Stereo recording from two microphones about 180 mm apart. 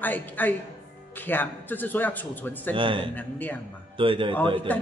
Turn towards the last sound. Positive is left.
turn(degrees=10)  # may be behind; listen again after turning